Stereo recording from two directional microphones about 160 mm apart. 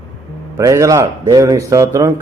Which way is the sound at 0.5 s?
20° right (ahead or behind).